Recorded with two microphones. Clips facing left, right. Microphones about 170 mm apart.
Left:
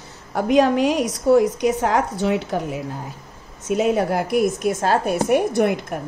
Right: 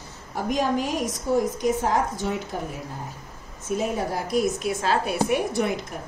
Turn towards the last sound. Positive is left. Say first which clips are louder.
# left 6 dB
turn(degrees=55)  # may be behind; listen again after turning